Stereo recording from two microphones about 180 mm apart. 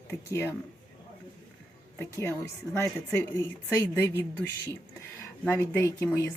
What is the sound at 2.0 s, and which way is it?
Speech, 15° left (ahead or behind).